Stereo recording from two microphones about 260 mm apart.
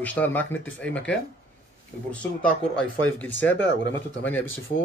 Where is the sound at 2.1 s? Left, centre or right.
Centre.